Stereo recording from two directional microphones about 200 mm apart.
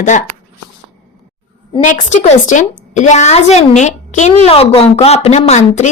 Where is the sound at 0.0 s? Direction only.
35° left (ahead or behind).